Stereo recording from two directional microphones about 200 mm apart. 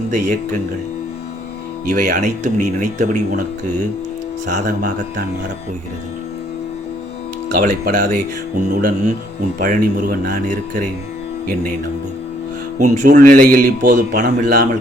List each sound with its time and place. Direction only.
1.9 s speech: 40° right (ahead or behind)
4.5 s speech: 40° right (ahead or behind)
7.5 s a man's voice: 45° right (ahead or behind)
12.8 s a man's voice: 40° right (ahead or behind)